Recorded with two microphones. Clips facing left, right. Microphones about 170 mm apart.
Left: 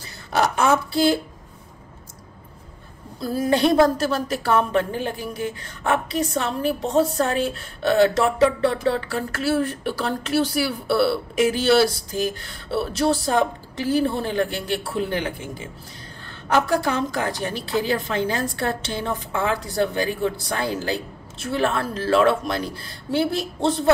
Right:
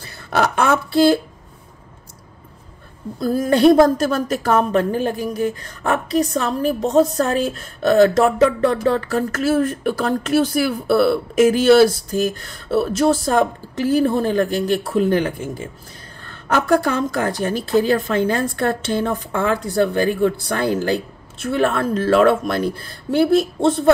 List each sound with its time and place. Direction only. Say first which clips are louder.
0.0 s speech: right 2 dB; 55° right (ahead or behind)
3.2 s a woman's voice: right 4 dB; 50° right (ahead or behind)